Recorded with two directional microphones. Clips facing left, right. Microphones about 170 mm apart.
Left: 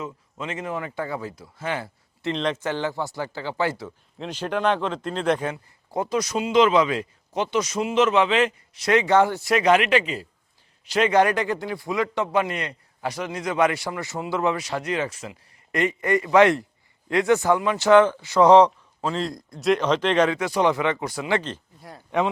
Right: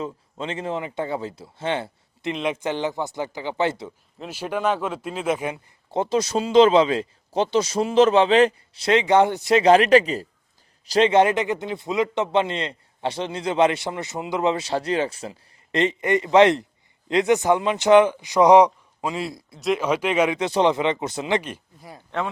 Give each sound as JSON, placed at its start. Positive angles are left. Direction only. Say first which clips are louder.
{"t": 0.0, "sound": "speech", "louder": "right 3 dB", "side_deg": -30}
{"t": 2.3, "sound": "a man's voice", "louder": "even", "side_deg": -10}
{"t": 4.2, "sound": "speech", "louder": "left 1 dB", "side_deg": -10}
{"t": 5.9, "sound": "a man's voice", "louder": "right 3 dB", "side_deg": -25}
{"t": 20.4, "sound": "a man's voice", "louder": "right 2 dB", "side_deg": -25}
{"t": 22.1, "sound": "speech", "louder": "left 4 dB", "side_deg": 10}